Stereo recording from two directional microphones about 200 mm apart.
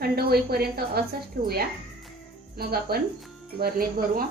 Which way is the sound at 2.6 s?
50° right (ahead or behind).